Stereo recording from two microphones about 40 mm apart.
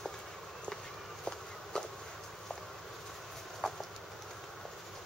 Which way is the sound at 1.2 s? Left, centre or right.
Centre.